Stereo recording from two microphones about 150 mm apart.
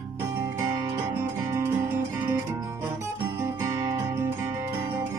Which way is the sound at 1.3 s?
20° right (ahead or behind).